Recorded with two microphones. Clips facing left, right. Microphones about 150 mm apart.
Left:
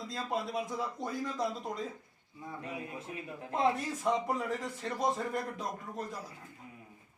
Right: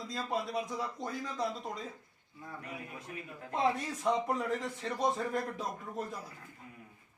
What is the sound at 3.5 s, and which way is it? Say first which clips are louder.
A man's voice: left 1 dB; 5° left (ahead or behind).